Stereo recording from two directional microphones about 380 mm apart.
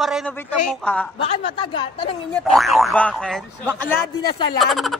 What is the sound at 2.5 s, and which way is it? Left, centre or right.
Speech, centre.